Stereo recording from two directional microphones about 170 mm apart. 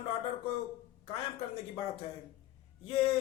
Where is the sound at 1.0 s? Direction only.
35° left (ahead or behind).